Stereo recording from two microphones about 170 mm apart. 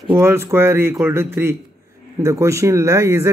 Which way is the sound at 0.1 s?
15° right (ahead or behind).